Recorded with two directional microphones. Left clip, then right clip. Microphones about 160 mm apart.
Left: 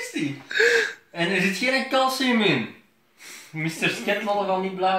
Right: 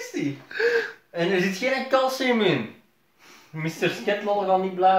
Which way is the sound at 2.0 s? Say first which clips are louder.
Left 1 dB; 30° right (ahead or behind).